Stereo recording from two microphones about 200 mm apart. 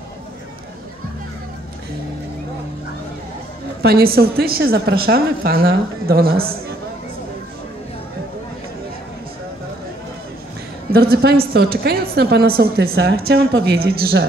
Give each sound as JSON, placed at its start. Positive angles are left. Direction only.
{"t": 3.8, "sound": "a woman's voice", "side_deg": -50}
{"t": 10.9, "sound": "a woman's voice", "side_deg": -50}